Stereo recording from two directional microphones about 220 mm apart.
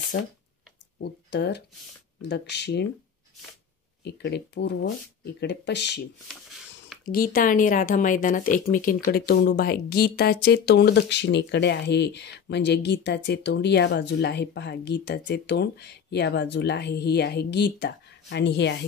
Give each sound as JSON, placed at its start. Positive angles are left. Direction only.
{"t": 0.1, "sound": "speech", "side_deg": 55}
{"t": 4.0, "sound": "speech", "side_deg": 50}
{"t": 7.1, "sound": "speech", "side_deg": 40}